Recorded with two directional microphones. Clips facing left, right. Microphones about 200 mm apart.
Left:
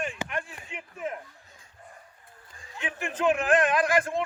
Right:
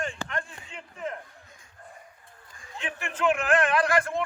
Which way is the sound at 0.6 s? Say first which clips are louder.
Left 1 dB; 20° left (ahead or behind).